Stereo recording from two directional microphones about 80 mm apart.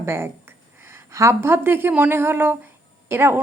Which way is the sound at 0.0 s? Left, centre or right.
Right.